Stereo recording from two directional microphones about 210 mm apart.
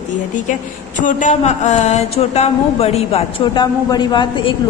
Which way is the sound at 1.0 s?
35° left (ahead or behind).